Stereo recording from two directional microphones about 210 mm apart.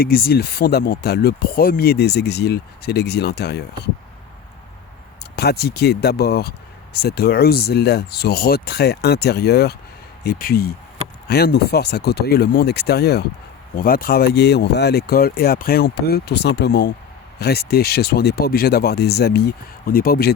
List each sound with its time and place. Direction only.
0.0 s speech: 45° left (ahead or behind)
5.2 s speech: 50° left (ahead or behind)